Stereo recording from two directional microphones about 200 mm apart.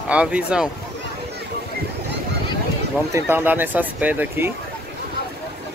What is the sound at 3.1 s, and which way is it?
Speech, 10° right (ahead or behind).